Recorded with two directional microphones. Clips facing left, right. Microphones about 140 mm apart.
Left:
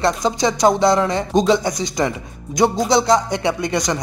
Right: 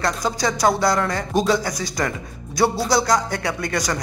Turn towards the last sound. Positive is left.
turn(degrees=20)  # may be behind; listen again after turning